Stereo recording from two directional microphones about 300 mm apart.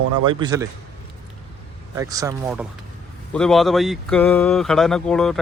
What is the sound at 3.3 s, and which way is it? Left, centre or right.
Speech, centre.